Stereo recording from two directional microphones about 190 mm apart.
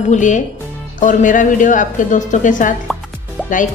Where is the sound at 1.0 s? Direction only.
45° left (ahead or behind).